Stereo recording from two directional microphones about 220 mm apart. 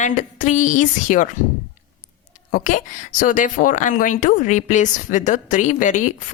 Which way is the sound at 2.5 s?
35° left (ahead or behind).